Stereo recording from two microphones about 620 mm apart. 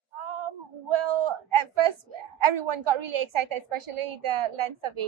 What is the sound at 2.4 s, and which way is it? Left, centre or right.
A woman's voice, right.